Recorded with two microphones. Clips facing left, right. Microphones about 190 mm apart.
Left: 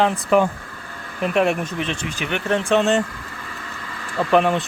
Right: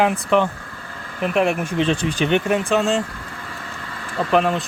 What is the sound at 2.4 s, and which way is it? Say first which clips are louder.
Speech: left 1 dB; 5° right (ahead or behind).